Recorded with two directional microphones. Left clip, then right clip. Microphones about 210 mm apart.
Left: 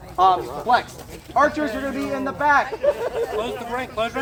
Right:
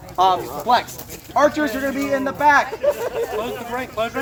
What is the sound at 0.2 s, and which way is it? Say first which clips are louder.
Speech: even; 55° right (ahead or behind).